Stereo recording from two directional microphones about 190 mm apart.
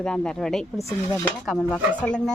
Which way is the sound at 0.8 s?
15° left (ahead or behind).